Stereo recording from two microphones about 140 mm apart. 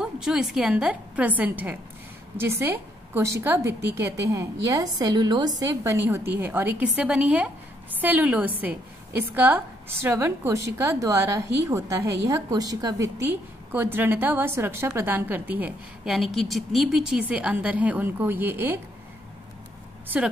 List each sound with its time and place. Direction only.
0.0 s a woman's voice: 5° right (ahead or behind)
16.2 s a woman's voice: centre (ahead or behind)